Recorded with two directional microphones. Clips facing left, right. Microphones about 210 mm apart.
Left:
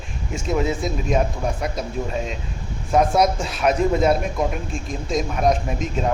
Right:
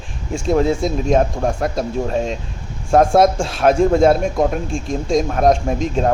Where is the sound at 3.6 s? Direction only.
50° right (ahead or behind).